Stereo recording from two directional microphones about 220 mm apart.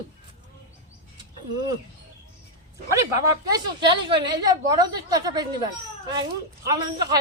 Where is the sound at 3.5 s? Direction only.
20° right (ahead or behind).